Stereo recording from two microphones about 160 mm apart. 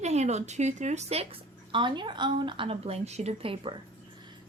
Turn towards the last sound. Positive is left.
turn(degrees=-35)  # may be behind; listen again after turning